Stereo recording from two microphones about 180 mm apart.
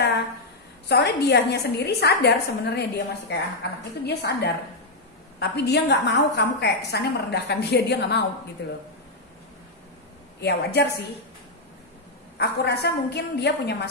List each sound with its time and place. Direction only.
0.8 s a woman's voice: 70° left (ahead or behind)
10.4 s a woman's voice: 65° left (ahead or behind)
12.4 s a woman's voice: 65° left (ahead or behind)